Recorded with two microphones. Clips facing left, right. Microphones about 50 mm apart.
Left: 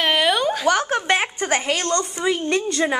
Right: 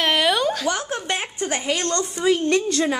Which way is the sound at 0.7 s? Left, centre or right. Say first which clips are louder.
Left 6 dB; left.